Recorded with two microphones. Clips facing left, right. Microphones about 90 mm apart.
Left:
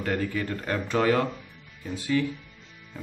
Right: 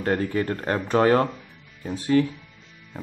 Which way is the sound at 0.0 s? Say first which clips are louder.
Right 4 dB; 35° right (ahead or behind).